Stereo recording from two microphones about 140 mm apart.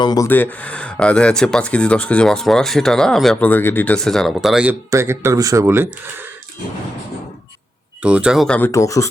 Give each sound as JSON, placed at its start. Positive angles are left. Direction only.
{"t": 0.0, "sound": "speech", "side_deg": 30}
{"t": 0.3, "sound": "speech", "side_deg": 15}
{"t": 3.5, "sound": "speech", "side_deg": 15}
{"t": 4.7, "sound": "speech", "side_deg": -20}
{"t": 8.0, "sound": "speech", "side_deg": -5}
{"t": 8.4, "sound": "speech", "side_deg": 10}
{"t": 8.7, "sound": "speech", "side_deg": 20}